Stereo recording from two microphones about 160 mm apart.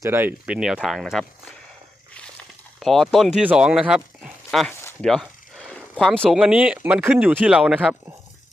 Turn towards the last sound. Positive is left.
turn(degrees=-5)  # may be behind; listen again after turning